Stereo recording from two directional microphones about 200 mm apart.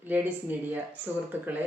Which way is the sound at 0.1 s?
10° right (ahead or behind).